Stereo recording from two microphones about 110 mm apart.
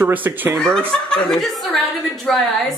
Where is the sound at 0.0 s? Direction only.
15° right (ahead or behind).